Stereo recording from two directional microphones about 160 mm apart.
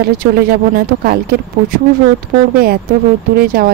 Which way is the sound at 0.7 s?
70° right (ahead or behind).